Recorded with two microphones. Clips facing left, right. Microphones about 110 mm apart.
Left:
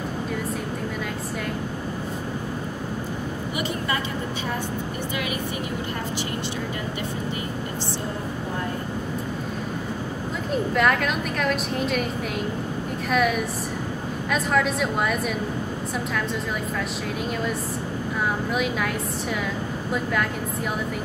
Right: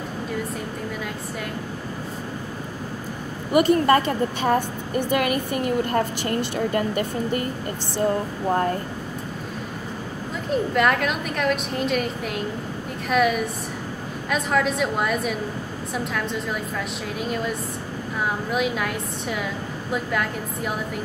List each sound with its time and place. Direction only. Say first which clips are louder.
3.5 s a woman's voice: right 13 dB; 50° right (ahead or behind)
10.5 s a woman's voice: right 1 dB; centre (ahead or behind)
17.3 s a woman's voice: even; centre (ahead or behind)
19.9 s a woman's voice: even; centre (ahead or behind)